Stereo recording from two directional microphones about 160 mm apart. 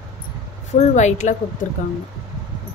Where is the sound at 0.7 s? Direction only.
45° left (ahead or behind).